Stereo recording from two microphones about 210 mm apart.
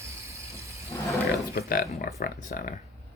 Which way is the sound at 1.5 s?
45° left (ahead or behind).